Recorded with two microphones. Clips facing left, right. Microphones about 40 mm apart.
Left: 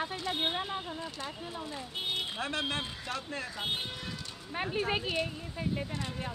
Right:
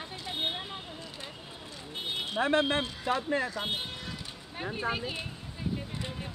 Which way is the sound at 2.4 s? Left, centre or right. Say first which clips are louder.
Right 7 dB; right.